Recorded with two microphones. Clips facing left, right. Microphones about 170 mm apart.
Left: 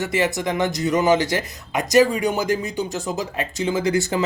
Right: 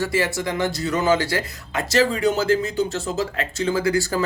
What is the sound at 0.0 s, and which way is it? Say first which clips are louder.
Speech: left 1 dB; 20° left (ahead or behind).